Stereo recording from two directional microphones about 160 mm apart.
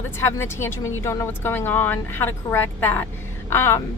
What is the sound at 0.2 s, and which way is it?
A woman's voice, 15° left (ahead or behind).